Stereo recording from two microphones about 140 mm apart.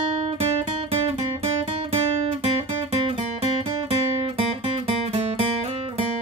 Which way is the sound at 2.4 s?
45° right (ahead or behind).